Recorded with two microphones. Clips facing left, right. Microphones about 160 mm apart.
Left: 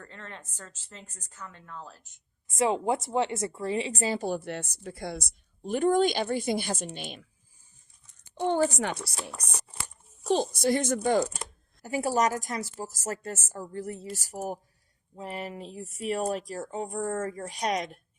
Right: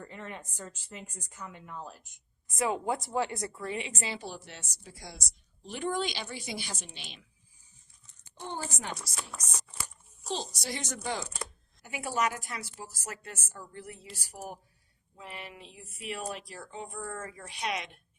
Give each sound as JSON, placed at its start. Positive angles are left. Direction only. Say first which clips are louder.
{"t": 0.0, "sound": "a woman's voice", "louder": "right 2 dB", "side_deg": -10}
{"t": 2.5, "sound": "speech", "louder": "left 5 dB", "side_deg": 25}
{"t": 8.4, "sound": "speech", "louder": "left 13 dB", "side_deg": 65}
{"t": 9.4, "sound": "a sound", "louder": "left 3 dB", "side_deg": 60}
{"t": 10.2, "sound": "speech", "louder": "left 11 dB", "side_deg": 55}
{"t": 11.8, "sound": "speech", "louder": "left 6 dB", "side_deg": 40}